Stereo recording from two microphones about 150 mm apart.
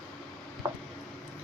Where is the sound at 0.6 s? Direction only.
15° right (ahead or behind).